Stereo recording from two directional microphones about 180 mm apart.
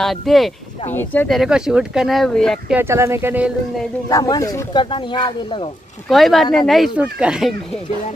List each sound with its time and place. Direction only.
0.0 s speech: centre (ahead or behind)
2.7 s speech: 15° right (ahead or behind)
4.1 s speech: 20° left (ahead or behind)
6.0 s speech: centre (ahead or behind)